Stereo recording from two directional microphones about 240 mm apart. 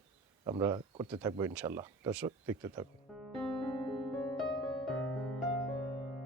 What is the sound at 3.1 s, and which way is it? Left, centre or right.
Music, centre.